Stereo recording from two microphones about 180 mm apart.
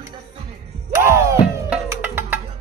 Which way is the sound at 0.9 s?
15° right (ahead or behind).